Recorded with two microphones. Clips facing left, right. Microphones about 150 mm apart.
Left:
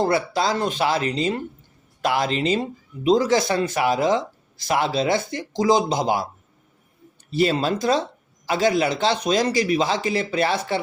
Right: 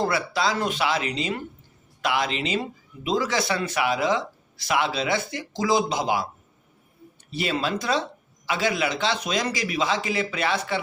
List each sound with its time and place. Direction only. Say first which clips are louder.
0.3 s a man's voice: left 2 dB; 40° left (ahead or behind)
7.3 s a man's voice: left 6 dB; 40° left (ahead or behind)